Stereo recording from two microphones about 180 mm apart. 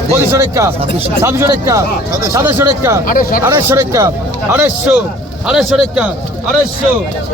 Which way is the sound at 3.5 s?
15° right (ahead or behind).